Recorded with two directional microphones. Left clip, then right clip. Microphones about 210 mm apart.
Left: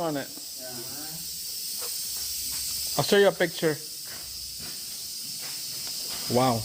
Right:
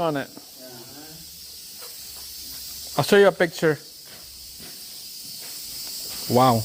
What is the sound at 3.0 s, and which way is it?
Speech, 30° right (ahead or behind).